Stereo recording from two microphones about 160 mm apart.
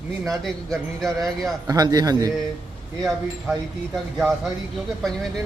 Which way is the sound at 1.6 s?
25° right (ahead or behind).